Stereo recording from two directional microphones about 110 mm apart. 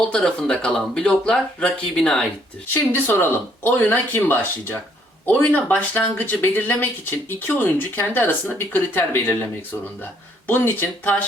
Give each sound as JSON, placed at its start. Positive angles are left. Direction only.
{"t": 0.1, "sound": "speech", "side_deg": 5}
{"t": 2.9, "sound": "speech", "side_deg": 20}